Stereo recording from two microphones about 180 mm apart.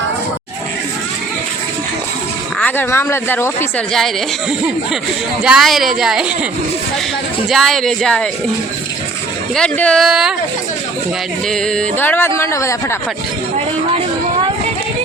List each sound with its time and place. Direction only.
2.6 s speech: 10° left (ahead or behind)
5.4 s speech: 5° right (ahead or behind)
7.5 s speech: centre (ahead or behind)
9.6 s speech: 5° left (ahead or behind)
11.4 s speech: 5° left (ahead or behind)